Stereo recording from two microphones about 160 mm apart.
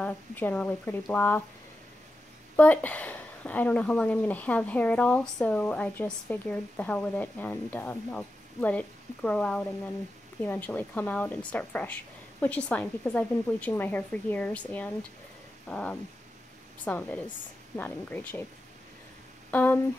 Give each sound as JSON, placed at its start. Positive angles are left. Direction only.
{"t": 0.0, "sound": "speech", "side_deg": 10}
{"t": 2.5, "sound": "speech", "side_deg": 10}
{"t": 19.5, "sound": "speech", "side_deg": 10}